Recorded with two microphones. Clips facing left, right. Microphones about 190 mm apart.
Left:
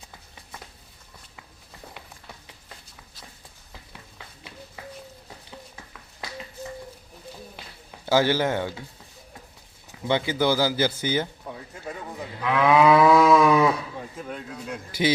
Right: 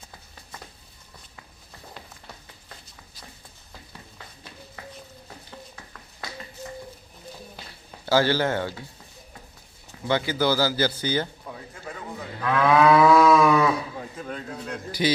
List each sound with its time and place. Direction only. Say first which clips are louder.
8.0 s a man's voice: even; 15° left (ahead or behind)
10.1 s a man's voice: left 1 dB; 20° left (ahead or behind)
12.4 s livestock: even; 15° left (ahead or behind)
14.2 s speech: right 1 dB; 5° left (ahead or behind)
15.0 s a man's voice: left 1 dB; 20° left (ahead or behind)